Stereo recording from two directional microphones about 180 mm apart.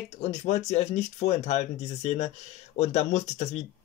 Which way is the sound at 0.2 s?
40° left (ahead or behind).